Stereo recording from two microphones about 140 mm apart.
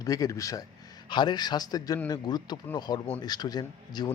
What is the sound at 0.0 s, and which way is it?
Speech, 25° left (ahead or behind).